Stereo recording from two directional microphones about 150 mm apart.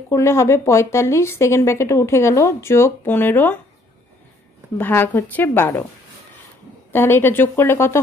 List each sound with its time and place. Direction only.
0.1 s speech: 20° left (ahead or behind)
4.7 s a woman's voice: 15° left (ahead or behind)
6.9 s a woman's voice: 15° left (ahead or behind)